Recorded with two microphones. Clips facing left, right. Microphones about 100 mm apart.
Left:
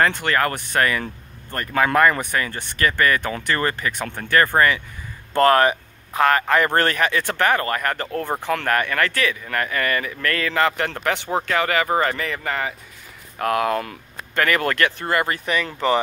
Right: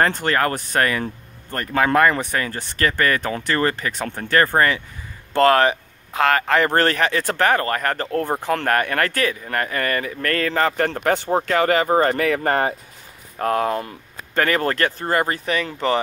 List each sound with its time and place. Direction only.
0.0 s speech: 40° right (ahead or behind)
12.2 s speech: 50° right (ahead or behind)
13.4 s speech: 30° right (ahead or behind)